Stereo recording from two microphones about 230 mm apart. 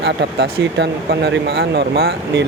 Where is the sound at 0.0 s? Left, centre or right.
Right.